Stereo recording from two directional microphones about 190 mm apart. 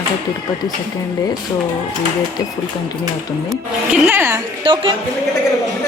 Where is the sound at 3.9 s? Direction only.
10° right (ahead or behind).